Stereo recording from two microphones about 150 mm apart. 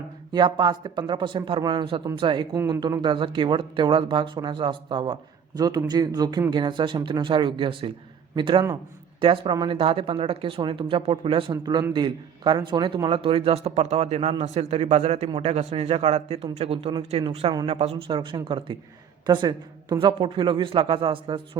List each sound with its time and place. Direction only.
0.3 s a man's voice: 30° right (ahead or behind)